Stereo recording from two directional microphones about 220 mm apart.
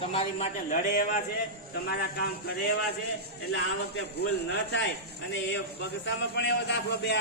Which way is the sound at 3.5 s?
50° left (ahead or behind).